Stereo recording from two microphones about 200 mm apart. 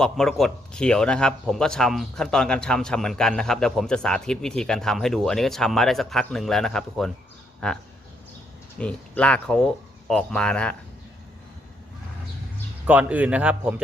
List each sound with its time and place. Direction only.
0.0 s speech: centre (ahead or behind)
8.8 s speech: 5° left (ahead or behind)
12.9 s a man's voice: 5° right (ahead or behind)